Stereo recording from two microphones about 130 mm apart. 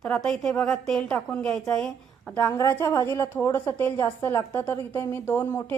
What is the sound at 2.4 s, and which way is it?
A woman's voice, 20° left (ahead or behind).